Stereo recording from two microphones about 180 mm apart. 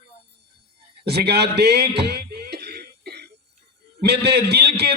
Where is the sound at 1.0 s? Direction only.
65° right (ahead or behind).